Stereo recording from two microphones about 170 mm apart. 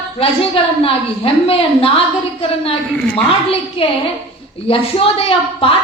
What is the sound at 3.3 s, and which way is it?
A woman's voice, 35° left (ahead or behind).